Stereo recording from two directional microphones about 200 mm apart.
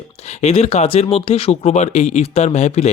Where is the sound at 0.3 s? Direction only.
30° left (ahead or behind).